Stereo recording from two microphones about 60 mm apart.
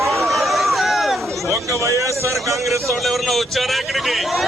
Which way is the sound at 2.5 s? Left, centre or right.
Centre.